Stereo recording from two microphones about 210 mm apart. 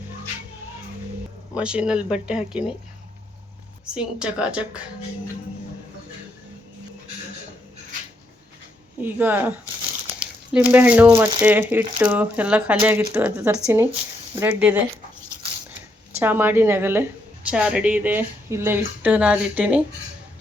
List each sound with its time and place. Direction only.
1.5 s speech: 5° right (ahead or behind)
3.9 s speech: 5° right (ahead or behind)
9.0 s speech: 10° right (ahead or behind)
10.2 s a sound: 5° right (ahead or behind)
11.1 s speech: 20° right (ahead or behind)
11.4 s speech: 10° right (ahead or behind)
16.1 s speech: 10° right (ahead or behind)